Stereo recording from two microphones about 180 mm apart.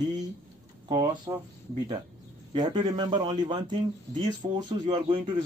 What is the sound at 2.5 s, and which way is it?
Speech, 25° right (ahead or behind).